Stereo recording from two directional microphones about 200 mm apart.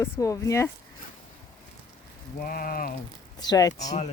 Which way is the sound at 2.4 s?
45° left (ahead or behind).